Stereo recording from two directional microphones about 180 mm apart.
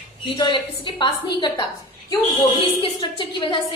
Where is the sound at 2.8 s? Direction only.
25° left (ahead or behind).